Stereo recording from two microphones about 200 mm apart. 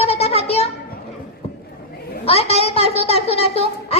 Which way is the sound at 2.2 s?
30° left (ahead or behind).